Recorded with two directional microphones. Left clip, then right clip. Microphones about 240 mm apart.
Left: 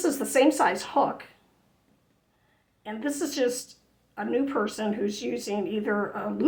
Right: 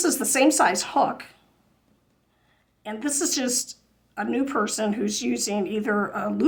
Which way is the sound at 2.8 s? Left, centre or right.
Right.